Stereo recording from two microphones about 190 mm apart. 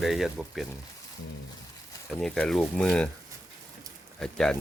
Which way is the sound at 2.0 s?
5° left (ahead or behind).